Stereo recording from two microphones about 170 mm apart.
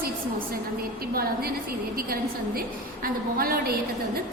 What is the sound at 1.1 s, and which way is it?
Speech, 60° right (ahead or behind).